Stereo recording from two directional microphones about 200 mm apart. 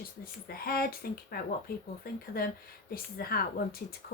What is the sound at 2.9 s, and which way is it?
Speech, 50° left (ahead or behind).